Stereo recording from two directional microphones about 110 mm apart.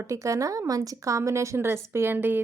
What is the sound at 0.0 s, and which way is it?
A woman's voice, 30° right (ahead or behind).